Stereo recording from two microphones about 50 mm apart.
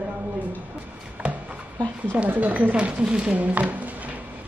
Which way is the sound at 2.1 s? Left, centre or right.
Right.